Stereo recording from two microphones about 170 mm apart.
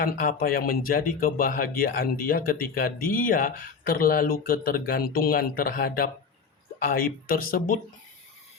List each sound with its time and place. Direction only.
0.0 s speech: 55° left (ahead or behind)